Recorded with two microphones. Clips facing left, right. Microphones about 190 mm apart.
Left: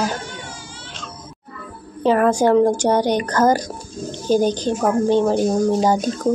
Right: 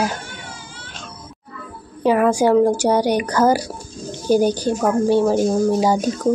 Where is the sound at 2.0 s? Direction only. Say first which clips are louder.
Even; 10° right (ahead or behind).